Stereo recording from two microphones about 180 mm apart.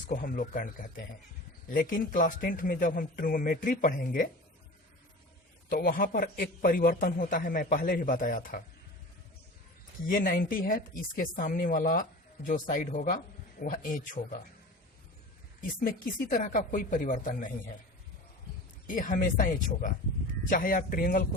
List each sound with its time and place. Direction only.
0.1 s a man's voice: 45° left (ahead or behind)
5.6 s a man's voice: 55° left (ahead or behind)
10.1 s a man's voice: 55° left (ahead or behind)
15.8 s a man's voice: 50° left (ahead or behind)
18.9 s a man's voice: 50° left (ahead or behind)